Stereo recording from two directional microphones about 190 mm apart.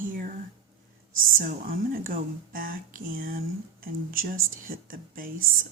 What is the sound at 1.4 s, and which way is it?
Speech, 45° right (ahead or behind).